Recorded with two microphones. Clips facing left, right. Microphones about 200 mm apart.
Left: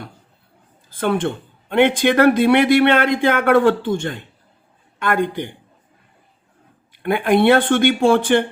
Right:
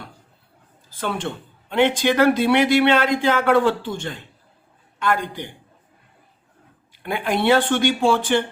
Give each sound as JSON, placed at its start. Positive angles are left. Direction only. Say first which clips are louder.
{"t": 0.9, "sound": "speech", "louder": "left 7 dB", "side_deg": 55}
{"t": 7.0, "sound": "speech", "louder": "left 7 dB", "side_deg": 55}